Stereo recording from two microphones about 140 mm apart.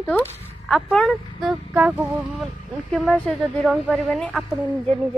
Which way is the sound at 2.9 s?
5° left (ahead or behind).